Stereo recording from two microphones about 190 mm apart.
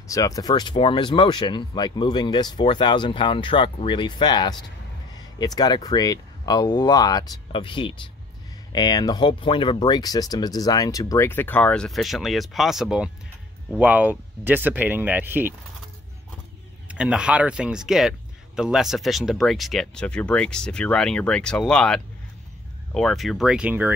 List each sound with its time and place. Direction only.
0.1 s speech: 20° left (ahead or behind); by 15.5 s 10° right (ahead or behind)
16.8 s speech: 5° right (ahead or behind)